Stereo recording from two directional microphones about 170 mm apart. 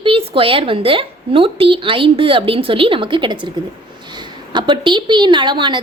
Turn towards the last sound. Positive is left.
turn(degrees=-25)  # may be behind; listen again after turning